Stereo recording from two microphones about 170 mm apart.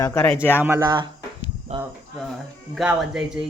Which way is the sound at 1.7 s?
40° right (ahead or behind).